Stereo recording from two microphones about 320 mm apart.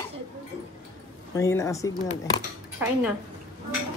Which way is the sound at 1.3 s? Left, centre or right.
Centre.